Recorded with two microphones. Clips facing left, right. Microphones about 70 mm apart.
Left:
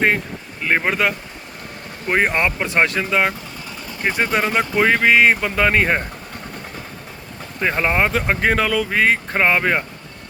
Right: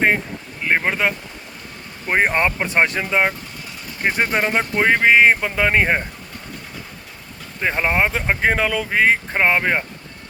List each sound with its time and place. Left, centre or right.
0.7 s speech: centre
2.3 s speech: centre
7.6 s speech: centre